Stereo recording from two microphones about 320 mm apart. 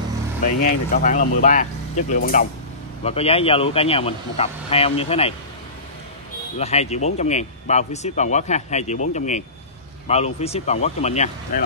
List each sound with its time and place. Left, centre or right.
0.9 s speech: left
6.6 s speech: centre